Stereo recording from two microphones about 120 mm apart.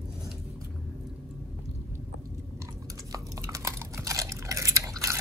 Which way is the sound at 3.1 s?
25° right (ahead or behind).